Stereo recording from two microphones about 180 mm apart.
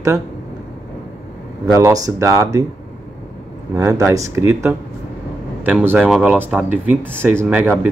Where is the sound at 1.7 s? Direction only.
20° right (ahead or behind).